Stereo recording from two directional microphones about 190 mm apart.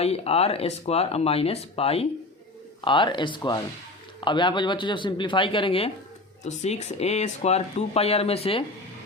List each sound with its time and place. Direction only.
0.0 s speech: 30° left (ahead or behind)